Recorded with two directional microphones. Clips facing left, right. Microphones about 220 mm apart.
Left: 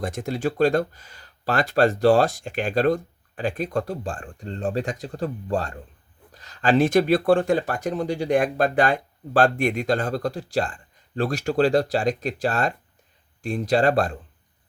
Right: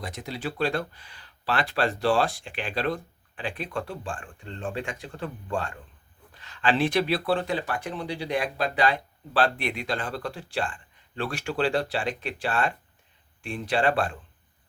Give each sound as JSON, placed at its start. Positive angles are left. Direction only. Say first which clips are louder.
{"t": 0.0, "sound": "speech", "louder": "left 8 dB", "side_deg": 50}